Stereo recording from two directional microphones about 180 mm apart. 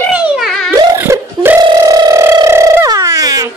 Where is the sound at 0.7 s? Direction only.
20° right (ahead or behind).